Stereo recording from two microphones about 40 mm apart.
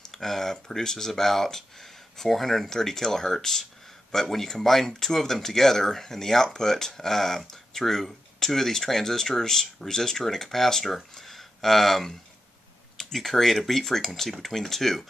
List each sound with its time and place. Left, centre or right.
0.1 s speech: centre